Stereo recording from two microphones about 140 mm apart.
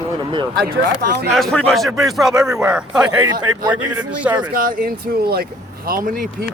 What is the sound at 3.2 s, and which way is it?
Speech, 30° right (ahead or behind).